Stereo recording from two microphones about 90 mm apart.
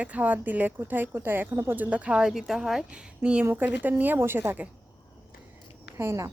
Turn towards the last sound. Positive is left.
turn(degrees=-30)  # may be behind; listen again after turning